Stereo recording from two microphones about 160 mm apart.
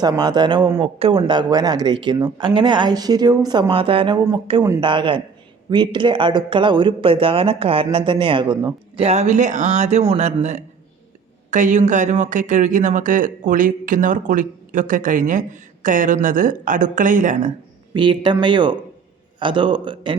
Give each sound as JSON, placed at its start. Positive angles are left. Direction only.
{"t": 0.0, "sound": "speech", "side_deg": -25}
{"t": 9.0, "sound": "speech", "side_deg": -40}
{"t": 17.9, "sound": "speech", "side_deg": -30}